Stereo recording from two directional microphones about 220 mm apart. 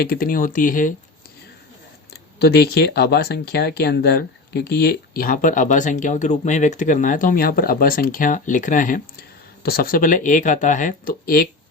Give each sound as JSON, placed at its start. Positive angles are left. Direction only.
{"t": 0.0, "sound": "speech", "side_deg": 40}
{"t": 2.4, "sound": "speech", "side_deg": 45}